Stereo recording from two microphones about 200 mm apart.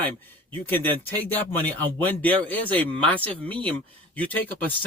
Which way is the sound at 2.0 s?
10° left (ahead or behind).